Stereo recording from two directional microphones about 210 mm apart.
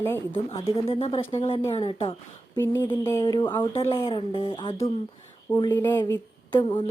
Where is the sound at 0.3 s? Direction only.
25° left (ahead or behind).